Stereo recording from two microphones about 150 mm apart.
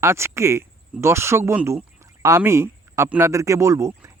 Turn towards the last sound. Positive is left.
turn(degrees=-20)  # may be behind; listen again after turning